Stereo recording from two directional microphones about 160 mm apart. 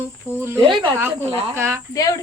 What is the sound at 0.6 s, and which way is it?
Speech, 30° right (ahead or behind).